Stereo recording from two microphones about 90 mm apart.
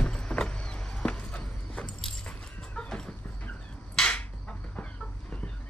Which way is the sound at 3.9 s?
10° left (ahead or behind).